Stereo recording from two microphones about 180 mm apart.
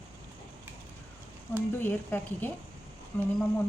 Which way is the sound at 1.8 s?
10° left (ahead or behind).